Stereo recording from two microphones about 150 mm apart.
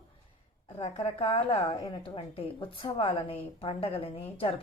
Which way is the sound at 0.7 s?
40° left (ahead or behind).